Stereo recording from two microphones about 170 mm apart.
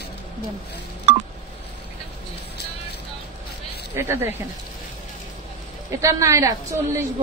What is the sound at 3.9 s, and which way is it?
Speech, 15° right (ahead or behind).